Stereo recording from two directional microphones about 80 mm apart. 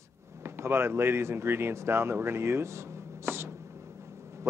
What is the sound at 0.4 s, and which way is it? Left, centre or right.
Speech, right.